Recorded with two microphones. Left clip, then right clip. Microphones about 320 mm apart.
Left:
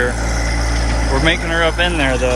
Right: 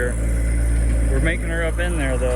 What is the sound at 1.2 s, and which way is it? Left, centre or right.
Speech, centre.